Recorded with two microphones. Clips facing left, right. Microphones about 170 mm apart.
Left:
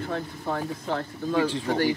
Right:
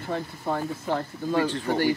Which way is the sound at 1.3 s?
10° left (ahead or behind).